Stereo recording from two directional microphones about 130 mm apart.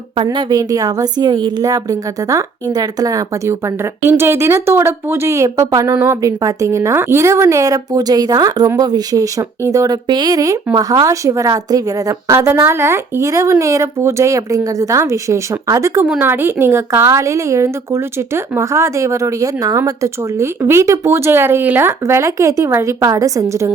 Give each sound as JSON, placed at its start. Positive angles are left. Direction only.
{"t": 0.3, "sound": "speech", "side_deg": -30}